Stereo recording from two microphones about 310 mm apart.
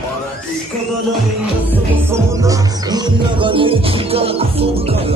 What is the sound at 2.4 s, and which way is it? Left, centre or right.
Music, centre.